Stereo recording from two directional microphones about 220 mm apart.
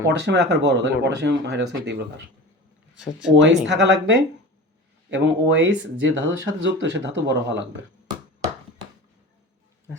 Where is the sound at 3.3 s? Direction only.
55° right (ahead or behind).